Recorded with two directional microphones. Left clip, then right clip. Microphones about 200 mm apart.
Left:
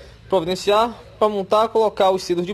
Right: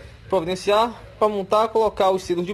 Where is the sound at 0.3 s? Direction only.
15° left (ahead or behind).